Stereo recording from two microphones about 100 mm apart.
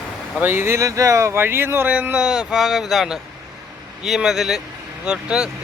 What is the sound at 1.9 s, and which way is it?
A man's voice, 10° right (ahead or behind).